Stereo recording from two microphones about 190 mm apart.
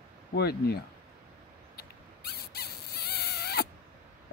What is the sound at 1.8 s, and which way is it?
Rodents, 55° left (ahead or behind).